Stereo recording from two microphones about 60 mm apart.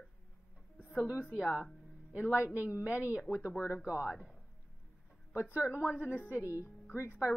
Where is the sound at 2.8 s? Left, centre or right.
Right.